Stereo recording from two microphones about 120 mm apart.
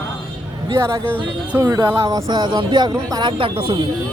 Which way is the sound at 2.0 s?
30° right (ahead or behind).